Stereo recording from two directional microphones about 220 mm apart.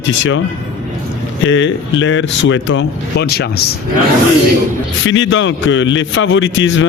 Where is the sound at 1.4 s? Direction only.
60° left (ahead or behind).